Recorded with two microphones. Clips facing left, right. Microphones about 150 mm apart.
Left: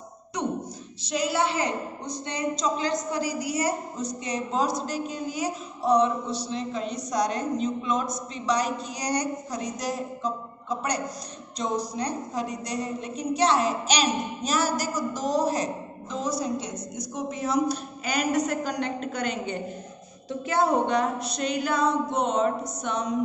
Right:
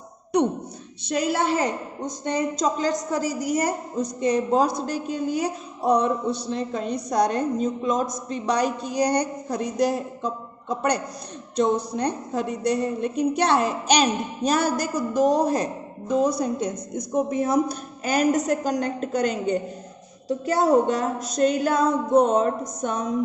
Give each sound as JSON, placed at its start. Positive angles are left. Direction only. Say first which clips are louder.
{"t": 1.0, "sound": "a woman's voice", "louder": "right 3 dB", "side_deg": -55}